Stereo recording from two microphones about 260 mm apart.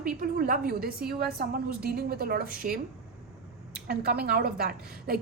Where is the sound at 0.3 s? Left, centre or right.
Right.